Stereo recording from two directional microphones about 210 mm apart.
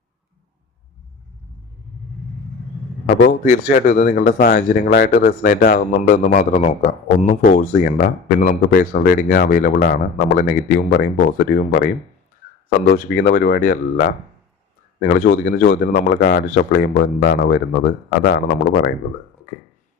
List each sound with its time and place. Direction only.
3.2 s speech: 40° left (ahead or behind)